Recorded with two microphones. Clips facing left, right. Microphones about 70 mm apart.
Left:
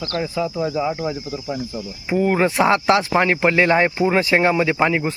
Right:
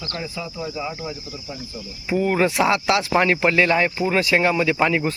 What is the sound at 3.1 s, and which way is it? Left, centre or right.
Speech, centre.